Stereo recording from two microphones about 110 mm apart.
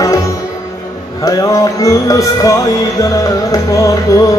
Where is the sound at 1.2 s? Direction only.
30° left (ahead or behind).